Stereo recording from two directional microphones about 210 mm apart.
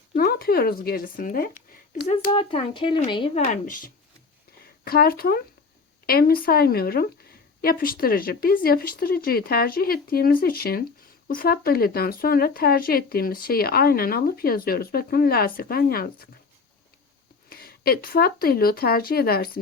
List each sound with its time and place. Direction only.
0.1 s speech: 45° left (ahead or behind)
2.1 s speech: 25° left (ahead or behind)
3.4 s speech: 40° left (ahead or behind)
17.5 s speech: 45° left (ahead or behind)